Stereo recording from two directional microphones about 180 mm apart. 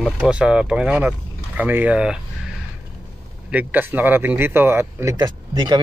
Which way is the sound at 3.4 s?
10° right (ahead or behind).